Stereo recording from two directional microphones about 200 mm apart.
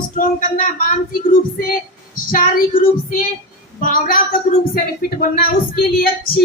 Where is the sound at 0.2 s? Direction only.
45° left (ahead or behind).